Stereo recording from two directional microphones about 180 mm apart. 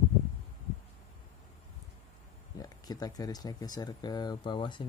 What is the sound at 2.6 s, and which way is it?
Speech, 20° left (ahead or behind).